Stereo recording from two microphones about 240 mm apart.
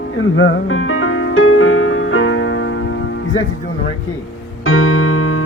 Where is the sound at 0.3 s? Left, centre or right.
Left.